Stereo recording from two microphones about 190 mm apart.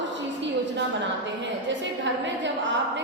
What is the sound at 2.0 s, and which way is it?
A woman's voice, 70° right (ahead or behind).